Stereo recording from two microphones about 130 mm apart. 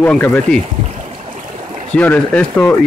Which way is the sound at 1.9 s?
10° left (ahead or behind).